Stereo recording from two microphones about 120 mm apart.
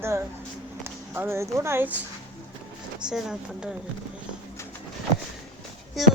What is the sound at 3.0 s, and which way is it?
Speech, 5° right (ahead or behind).